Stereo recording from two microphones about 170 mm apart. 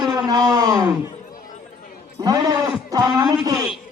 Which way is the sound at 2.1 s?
20° right (ahead or behind).